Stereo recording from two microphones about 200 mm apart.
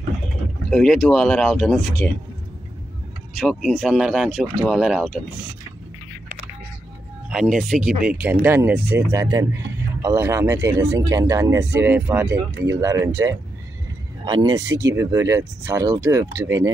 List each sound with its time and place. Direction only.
0.7 s speech: centre (ahead or behind)
3.3 s speech: 5° right (ahead or behind)
7.2 s a man's voice: centre (ahead or behind)